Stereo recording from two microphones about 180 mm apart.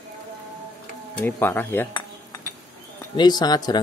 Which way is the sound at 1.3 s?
10° left (ahead or behind).